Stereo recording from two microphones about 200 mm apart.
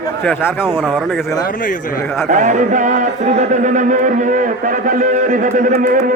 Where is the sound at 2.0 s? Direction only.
Centre (ahead or behind).